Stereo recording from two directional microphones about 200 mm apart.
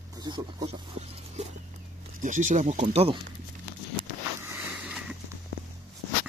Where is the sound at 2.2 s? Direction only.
40° right (ahead or behind).